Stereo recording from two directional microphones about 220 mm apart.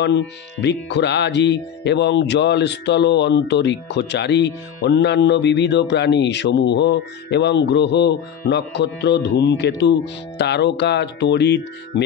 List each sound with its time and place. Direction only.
0.0 s speech: 50° left (ahead or behind)